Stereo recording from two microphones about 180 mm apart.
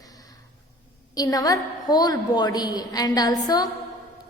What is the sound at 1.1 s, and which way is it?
A woman's voice, 20° left (ahead or behind).